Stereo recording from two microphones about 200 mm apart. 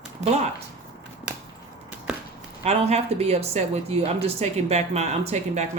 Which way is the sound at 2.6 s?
30° right (ahead or behind).